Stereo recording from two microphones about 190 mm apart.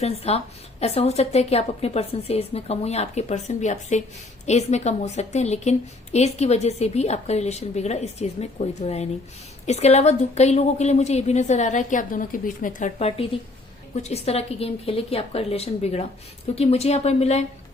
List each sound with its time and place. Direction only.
0.0 s a woman's voice: 30° left (ahead or behind)